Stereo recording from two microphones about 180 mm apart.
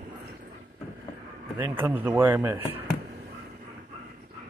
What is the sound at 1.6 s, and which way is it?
Speech, 10° right (ahead or behind).